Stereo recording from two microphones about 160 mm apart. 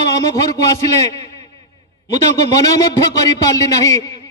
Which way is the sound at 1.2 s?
20° left (ahead or behind).